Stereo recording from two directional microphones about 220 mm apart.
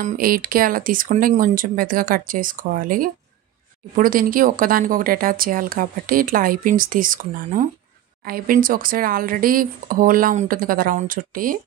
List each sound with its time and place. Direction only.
0.0 s speech: 40° right (ahead or behind)